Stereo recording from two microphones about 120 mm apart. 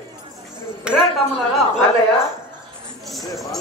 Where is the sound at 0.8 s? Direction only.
10° right (ahead or behind).